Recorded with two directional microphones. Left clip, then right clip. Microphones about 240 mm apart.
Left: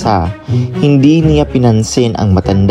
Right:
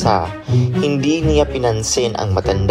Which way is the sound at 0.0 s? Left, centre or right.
Left.